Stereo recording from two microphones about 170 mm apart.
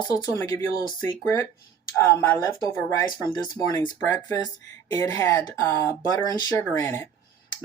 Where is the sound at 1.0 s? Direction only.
15° left (ahead or behind).